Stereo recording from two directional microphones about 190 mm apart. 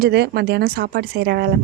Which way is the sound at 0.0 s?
60° right (ahead or behind).